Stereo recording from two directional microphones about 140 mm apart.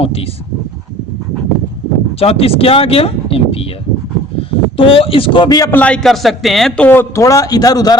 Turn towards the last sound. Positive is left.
turn(degrees=25)  # may be behind; listen again after turning